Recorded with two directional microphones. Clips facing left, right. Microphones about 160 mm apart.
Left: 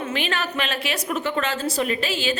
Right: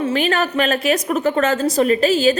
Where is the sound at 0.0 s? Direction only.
40° right (ahead or behind).